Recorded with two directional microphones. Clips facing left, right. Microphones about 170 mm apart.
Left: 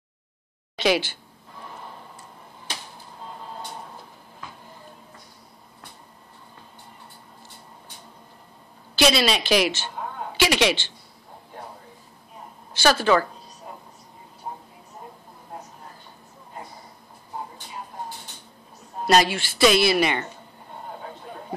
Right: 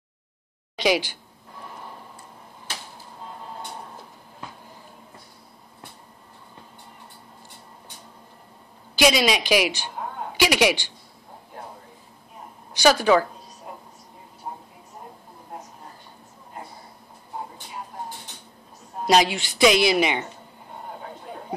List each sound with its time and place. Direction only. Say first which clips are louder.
0.7 s speech: even; 15° right (ahead or behind)
8.9 s speech: right 1 dB; 10° right (ahead or behind)
12.8 s speech: right 2 dB; 15° right (ahead or behind)
19.0 s speech: even; 15° right (ahead or behind)